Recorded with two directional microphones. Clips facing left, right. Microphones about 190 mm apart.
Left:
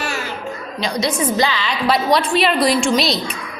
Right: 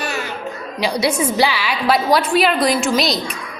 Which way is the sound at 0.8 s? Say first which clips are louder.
Right 2 dB; 10° right (ahead or behind).